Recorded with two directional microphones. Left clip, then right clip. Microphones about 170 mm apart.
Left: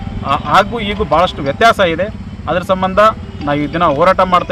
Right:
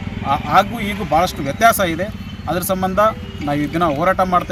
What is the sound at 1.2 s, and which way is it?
Speech, 10° right (ahead or behind).